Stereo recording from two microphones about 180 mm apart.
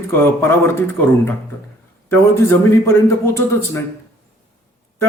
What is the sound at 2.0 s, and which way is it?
Speech, 15° left (ahead or behind).